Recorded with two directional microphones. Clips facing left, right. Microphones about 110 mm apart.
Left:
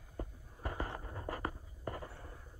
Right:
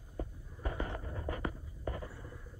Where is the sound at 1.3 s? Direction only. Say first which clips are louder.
Right 1 dB; 35° left (ahead or behind).